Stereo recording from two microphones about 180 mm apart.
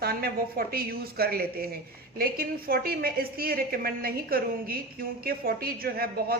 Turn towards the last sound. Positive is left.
turn(degrees=-55)  # may be behind; listen again after turning